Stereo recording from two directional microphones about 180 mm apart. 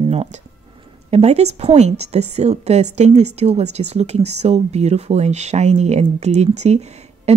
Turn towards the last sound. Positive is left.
turn(degrees=-35)  # may be behind; listen again after turning